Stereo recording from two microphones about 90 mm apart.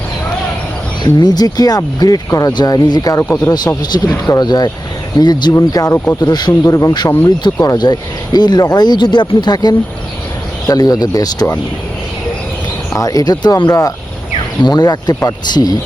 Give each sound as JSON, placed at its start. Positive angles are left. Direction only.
{"t": 1.0, "sound": "speech", "side_deg": 50}
{"t": 12.9, "sound": "speech", "side_deg": 40}
{"t": 14.6, "sound": "speech", "side_deg": 50}